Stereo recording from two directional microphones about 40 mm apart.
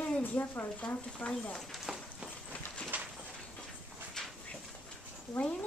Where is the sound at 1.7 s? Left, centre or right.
Centre.